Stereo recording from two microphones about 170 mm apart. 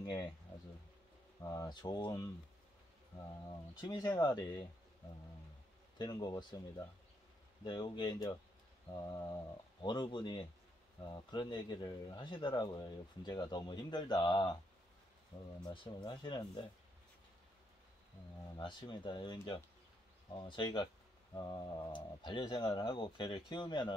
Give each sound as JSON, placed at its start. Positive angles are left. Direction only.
{"t": 0.0, "sound": "speech", "side_deg": 25}
{"t": 1.4, "sound": "speech", "side_deg": 20}
{"t": 3.8, "sound": "speech", "side_deg": 25}
{"t": 5.9, "sound": "speech", "side_deg": 25}
{"t": 7.6, "sound": "speech", "side_deg": 25}
{"t": 15.7, "sound": "speech", "side_deg": 30}
{"t": 18.6, "sound": "speech", "side_deg": 25}